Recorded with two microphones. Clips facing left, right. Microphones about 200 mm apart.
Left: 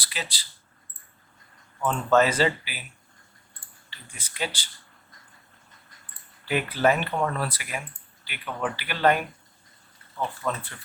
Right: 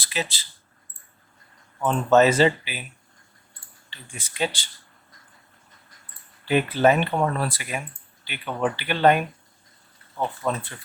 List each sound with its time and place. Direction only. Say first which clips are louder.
0.0 s speech: right 6 dB; 25° right (ahead or behind)
1.8 s speech: right 4 dB; 25° right (ahead or behind)
3.8 s speech: right 6 dB; 25° right (ahead or behind)
6.5 s speech: right 4 dB; 25° right (ahead or behind)